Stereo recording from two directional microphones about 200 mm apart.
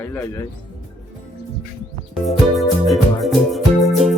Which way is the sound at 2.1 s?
Centre (ahead or behind).